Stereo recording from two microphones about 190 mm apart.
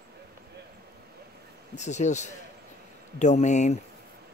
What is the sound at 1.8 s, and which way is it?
Speech, 40° left (ahead or behind).